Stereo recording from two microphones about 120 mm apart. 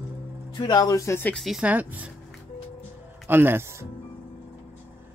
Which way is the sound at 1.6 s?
10° right (ahead or behind).